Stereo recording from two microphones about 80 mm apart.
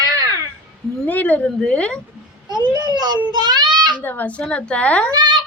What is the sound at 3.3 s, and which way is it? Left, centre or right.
Child singing, right.